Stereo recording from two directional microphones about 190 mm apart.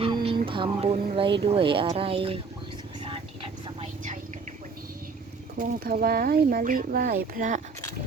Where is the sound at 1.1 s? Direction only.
25° right (ahead or behind).